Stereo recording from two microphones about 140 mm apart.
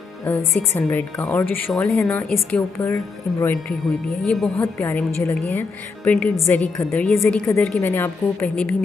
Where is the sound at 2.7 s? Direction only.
20° left (ahead or behind).